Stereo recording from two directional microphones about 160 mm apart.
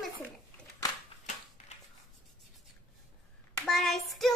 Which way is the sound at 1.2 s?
45° left (ahead or behind).